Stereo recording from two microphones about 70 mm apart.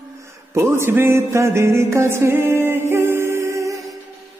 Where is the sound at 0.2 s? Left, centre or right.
Right.